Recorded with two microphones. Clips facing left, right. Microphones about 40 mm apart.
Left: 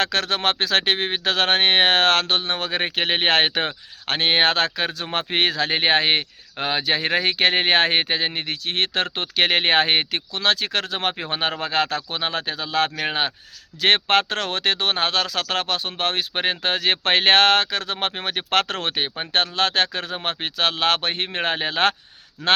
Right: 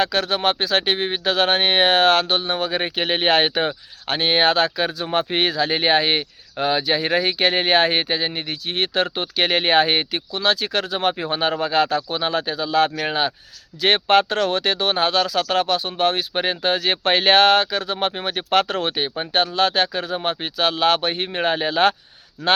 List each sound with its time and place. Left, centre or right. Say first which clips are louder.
0.0 s speech: right 2 dB; left
6.8 s speech: right 1 dB; left
13.0 s speech: right 2 dB; left
13.8 s speech: right 2 dB; left
22.4 s speech: right 1 dB; left